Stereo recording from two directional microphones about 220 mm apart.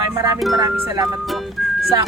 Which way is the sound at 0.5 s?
15° right (ahead or behind).